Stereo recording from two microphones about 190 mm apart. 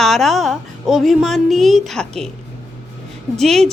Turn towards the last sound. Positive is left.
turn(degrees=0)  # may be behind; listen again after turning